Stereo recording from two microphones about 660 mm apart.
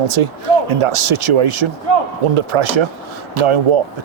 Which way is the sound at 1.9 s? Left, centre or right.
Left.